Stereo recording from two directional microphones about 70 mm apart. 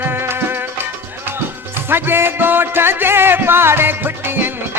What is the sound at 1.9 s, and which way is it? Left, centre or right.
Music, right.